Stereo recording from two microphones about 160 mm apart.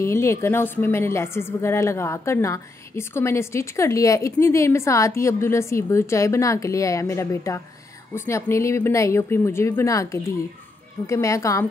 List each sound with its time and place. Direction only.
0.0 s a woman's voice: 15° left (ahead or behind)